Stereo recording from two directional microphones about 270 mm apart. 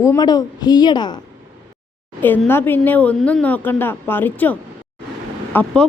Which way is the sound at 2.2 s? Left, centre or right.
Centre.